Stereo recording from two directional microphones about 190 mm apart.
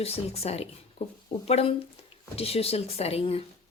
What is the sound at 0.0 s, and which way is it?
A woman's voice, 30° left (ahead or behind).